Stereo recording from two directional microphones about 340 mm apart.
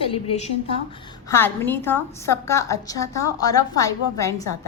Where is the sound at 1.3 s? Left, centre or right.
Centre.